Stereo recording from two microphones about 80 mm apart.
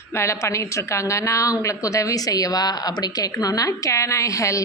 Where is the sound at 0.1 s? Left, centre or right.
Left.